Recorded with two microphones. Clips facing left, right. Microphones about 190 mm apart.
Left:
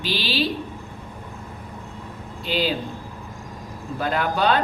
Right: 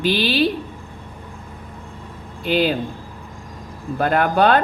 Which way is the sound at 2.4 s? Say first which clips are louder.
Right 5 dB; 55° right (ahead or behind).